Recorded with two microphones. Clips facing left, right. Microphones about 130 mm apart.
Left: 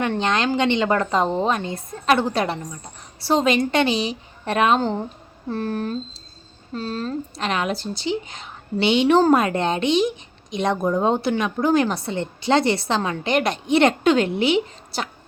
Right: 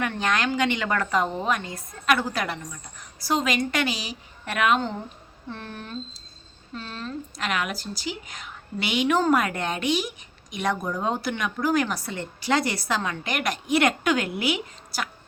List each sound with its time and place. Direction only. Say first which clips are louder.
0.0 s a woman's voice: left 4 dB; 25° left (ahead or behind)